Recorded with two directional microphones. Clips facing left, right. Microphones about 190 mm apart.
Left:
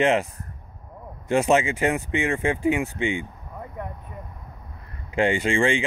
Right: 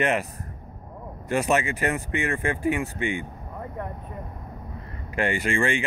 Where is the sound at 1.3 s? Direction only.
25° left (ahead or behind).